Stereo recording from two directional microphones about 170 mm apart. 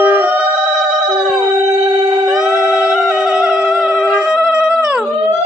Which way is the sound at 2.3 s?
5° right (ahead or behind).